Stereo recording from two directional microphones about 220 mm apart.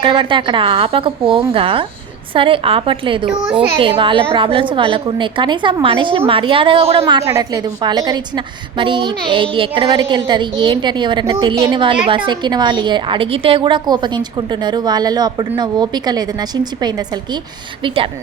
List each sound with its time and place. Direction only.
0.0 s a woman's voice: 25° right (ahead or behind)
7.0 s a woman's voice: 15° right (ahead or behind)